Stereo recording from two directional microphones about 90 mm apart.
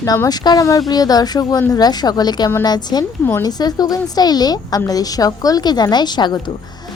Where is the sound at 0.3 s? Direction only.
45° left (ahead or behind).